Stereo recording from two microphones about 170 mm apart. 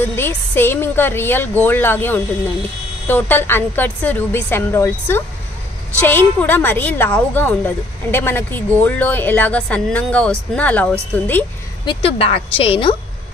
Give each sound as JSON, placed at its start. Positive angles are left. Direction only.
{"t": 0.1, "sound": "a woman's voice", "side_deg": 15}
{"t": 11.8, "sound": "a woman's voice", "side_deg": 30}